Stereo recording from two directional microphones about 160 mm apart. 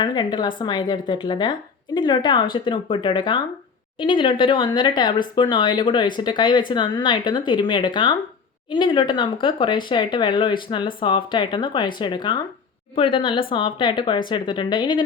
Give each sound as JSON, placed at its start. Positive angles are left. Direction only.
{"t": 0.0, "sound": "a woman's voice", "side_deg": 25}